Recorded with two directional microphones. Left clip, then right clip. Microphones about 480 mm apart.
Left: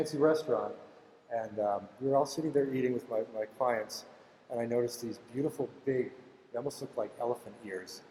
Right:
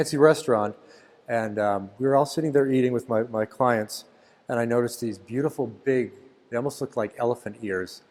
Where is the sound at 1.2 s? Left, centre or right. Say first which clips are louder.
Right 8 dB; right.